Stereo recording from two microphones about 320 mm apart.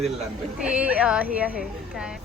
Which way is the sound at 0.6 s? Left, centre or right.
Centre.